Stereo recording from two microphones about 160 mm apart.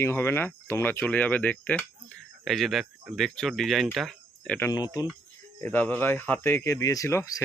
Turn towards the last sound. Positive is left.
turn(degrees=20)  # may be behind; listen again after turning